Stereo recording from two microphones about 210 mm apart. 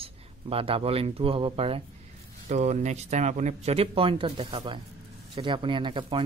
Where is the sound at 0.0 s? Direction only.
25° right (ahead or behind).